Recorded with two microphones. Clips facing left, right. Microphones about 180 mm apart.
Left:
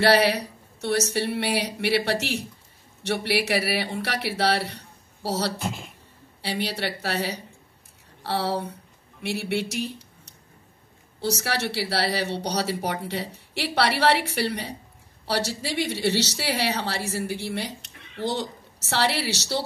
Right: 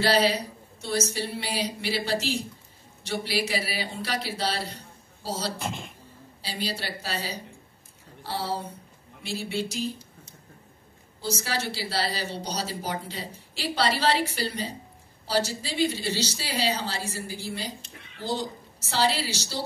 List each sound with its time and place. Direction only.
0.0 s a woman's voice: 65° left (ahead or behind)
5.6 s speech: centre (ahead or behind)
6.4 s a woman's voice: 70° left (ahead or behind)